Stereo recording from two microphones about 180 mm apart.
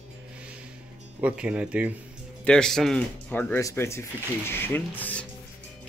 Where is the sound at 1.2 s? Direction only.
5° right (ahead or behind).